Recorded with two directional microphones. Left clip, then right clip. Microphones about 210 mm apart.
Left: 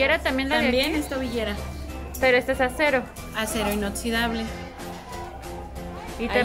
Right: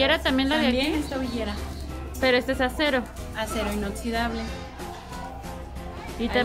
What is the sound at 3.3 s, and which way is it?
A woman's voice, 45° left (ahead or behind).